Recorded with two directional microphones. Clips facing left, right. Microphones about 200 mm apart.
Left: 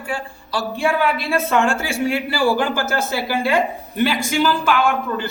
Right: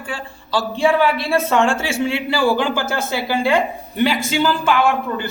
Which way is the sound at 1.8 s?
25° right (ahead or behind).